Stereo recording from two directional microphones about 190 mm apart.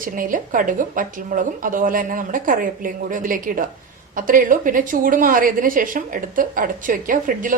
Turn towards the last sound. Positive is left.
turn(degrees=-45)  # may be behind; listen again after turning